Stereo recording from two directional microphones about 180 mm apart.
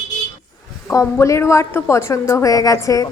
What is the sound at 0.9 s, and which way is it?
A woman's voice, 15° left (ahead or behind).